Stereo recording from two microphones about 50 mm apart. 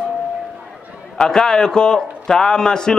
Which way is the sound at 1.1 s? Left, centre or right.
Centre.